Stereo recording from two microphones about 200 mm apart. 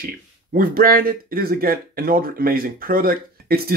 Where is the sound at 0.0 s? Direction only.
45° right (ahead or behind).